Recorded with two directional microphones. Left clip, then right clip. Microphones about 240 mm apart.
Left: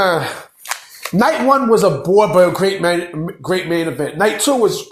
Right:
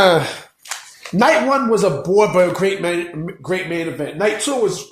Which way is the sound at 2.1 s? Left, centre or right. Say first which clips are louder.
Left 2 dB; centre.